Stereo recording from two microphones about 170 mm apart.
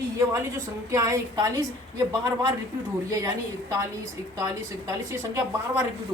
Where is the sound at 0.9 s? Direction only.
20° right (ahead or behind).